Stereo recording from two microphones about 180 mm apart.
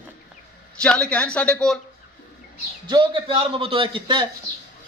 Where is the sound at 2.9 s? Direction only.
25° right (ahead or behind).